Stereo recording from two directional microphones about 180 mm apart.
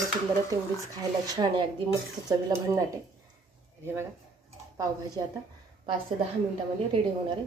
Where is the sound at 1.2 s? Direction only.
20° right (ahead or behind).